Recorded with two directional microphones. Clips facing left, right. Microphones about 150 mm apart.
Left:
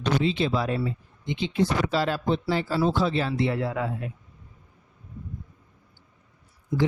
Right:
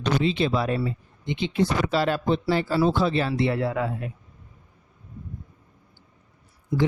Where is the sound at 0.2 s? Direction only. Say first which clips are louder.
Right 1 dB; 65° right (ahead or behind).